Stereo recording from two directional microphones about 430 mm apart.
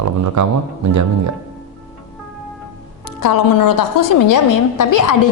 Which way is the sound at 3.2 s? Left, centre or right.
Left.